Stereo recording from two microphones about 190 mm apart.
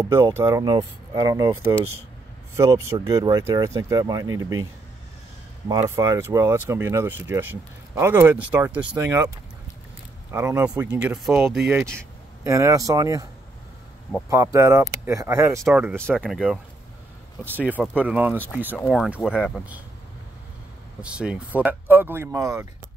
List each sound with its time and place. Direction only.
0.0 s speech: 15° right (ahead or behind)
5.7 s speech: 15° right (ahead or behind)
10.3 s speech: 15° right (ahead or behind)
14.3 s speech: 15° right (ahead or behind)
16.2 s speech: centre (ahead or behind)
21.0 s speech: 5° right (ahead or behind)